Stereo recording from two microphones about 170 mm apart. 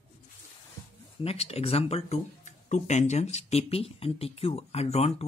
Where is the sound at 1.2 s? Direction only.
35° left (ahead or behind).